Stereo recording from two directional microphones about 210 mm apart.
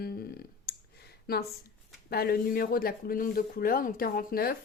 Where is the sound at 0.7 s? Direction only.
50° left (ahead or behind).